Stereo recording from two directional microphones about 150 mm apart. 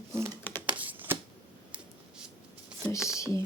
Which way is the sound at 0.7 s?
10° right (ahead or behind).